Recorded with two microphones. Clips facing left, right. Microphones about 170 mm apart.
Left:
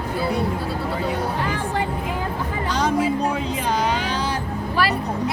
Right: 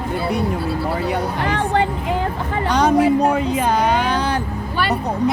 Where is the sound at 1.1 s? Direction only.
70° right (ahead or behind).